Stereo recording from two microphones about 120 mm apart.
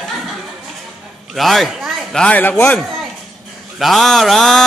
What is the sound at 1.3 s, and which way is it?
Speech, centre (ahead or behind).